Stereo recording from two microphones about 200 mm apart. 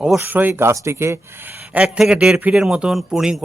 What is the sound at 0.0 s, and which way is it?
A man's voice, 5° right (ahead or behind).